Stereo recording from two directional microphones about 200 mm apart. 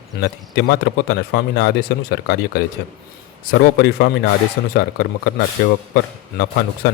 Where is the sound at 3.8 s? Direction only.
55° left (ahead or behind).